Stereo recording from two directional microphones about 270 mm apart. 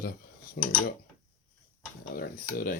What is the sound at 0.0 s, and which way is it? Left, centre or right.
Cutlery, left.